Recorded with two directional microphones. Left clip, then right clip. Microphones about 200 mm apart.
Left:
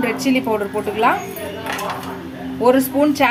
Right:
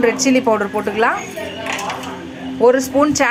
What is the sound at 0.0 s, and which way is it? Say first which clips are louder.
Speech: right 4 dB; 10° right (ahead or behind).